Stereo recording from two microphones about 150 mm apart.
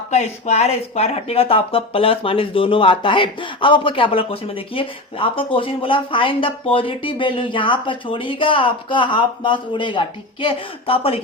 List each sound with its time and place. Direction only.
0.1 s speech: 45° left (ahead or behind)